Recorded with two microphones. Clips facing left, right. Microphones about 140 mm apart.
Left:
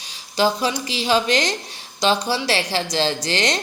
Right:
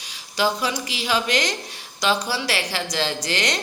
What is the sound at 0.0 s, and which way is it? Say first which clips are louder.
A man's voice: left 3 dB; 30° left (ahead or behind).